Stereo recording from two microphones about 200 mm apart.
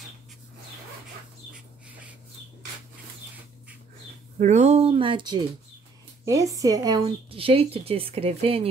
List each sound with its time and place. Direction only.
4.4 s speech: 35° right (ahead or behind)